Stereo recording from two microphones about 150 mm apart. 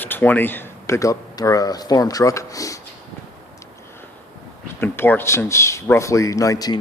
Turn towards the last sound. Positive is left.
turn(degrees=25)  # may be behind; listen again after turning